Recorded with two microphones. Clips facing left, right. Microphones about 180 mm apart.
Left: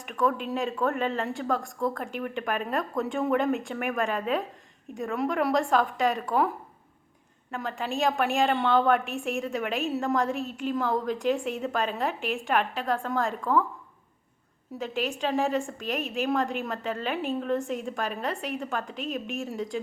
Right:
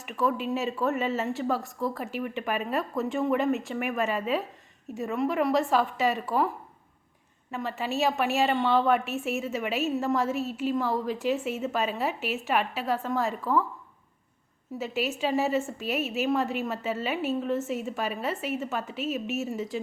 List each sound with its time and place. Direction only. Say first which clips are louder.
0.0 s a woman's voice: left 1 dB; 5° right (ahead or behind)
7.5 s a woman's voice: right 1 dB; 5° right (ahead or behind)
14.8 s a woman's voice: right 1 dB; 5° right (ahead or behind)